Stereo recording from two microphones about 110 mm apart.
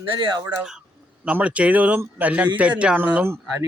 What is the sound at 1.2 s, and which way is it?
Speech, 10° right (ahead or behind).